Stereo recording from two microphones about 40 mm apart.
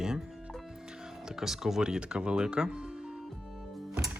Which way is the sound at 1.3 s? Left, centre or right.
Centre.